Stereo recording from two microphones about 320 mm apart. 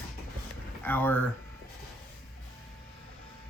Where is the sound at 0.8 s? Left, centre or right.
Centre.